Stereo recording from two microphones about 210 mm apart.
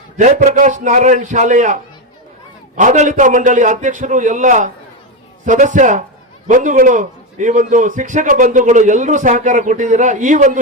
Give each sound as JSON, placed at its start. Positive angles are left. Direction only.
{"t": 0.2, "sound": "a man's voice", "side_deg": -35}